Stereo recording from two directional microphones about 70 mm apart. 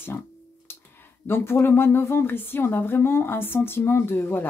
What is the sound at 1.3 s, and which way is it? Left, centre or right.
Speech, left.